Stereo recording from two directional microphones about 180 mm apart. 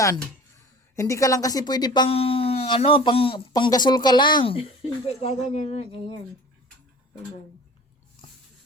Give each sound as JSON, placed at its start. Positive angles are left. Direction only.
{"t": 0.9, "sound": "speech", "side_deg": 15}